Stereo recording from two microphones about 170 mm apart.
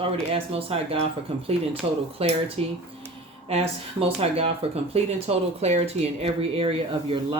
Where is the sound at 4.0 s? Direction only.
35° right (ahead or behind).